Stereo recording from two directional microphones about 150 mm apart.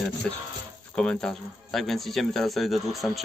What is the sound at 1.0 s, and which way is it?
Speech, 5° left (ahead or behind).